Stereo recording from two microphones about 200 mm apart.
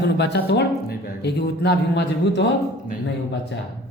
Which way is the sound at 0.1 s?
55° left (ahead or behind).